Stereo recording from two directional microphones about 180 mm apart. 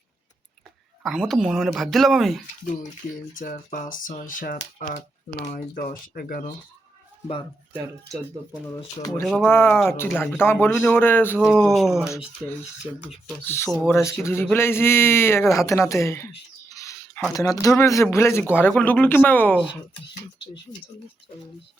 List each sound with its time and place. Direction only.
1.0 s speech: centre (ahead or behind)
3.3 s speech: 50° left (ahead or behind)
9.2 s speech: centre (ahead or behind)
9.5 s speech: 10° left (ahead or behind); by 13.1 s 5° right (ahead or behind)
13.4 s speech: 10° left (ahead or behind)
16.6 s a sound: 20° left (ahead or behind)
17.3 s speech: 20° left (ahead or behind)